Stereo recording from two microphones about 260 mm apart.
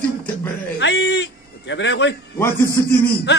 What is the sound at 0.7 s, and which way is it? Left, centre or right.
A man's voice, left.